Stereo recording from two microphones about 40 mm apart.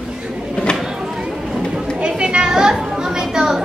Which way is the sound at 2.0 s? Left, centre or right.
Right.